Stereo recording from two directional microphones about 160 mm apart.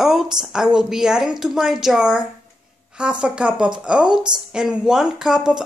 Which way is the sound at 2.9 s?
5° right (ahead or behind).